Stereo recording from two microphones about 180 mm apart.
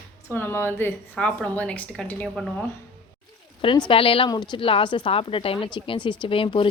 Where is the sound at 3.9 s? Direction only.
30° left (ahead or behind).